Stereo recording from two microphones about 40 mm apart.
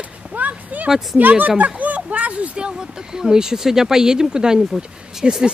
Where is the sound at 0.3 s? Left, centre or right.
Right.